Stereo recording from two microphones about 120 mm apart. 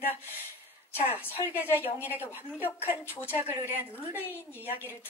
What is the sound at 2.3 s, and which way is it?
A woman's voice, 15° right (ahead or behind).